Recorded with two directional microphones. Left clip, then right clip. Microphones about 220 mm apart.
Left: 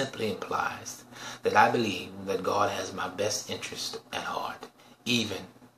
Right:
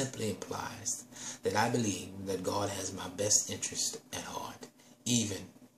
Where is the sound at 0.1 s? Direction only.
15° right (ahead or behind).